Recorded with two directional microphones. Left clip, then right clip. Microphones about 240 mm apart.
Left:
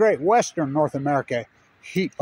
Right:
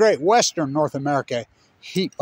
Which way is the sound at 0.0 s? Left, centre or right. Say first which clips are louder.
Right 2 dB; right.